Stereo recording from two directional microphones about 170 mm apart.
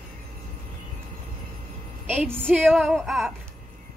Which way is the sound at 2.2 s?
10° right (ahead or behind).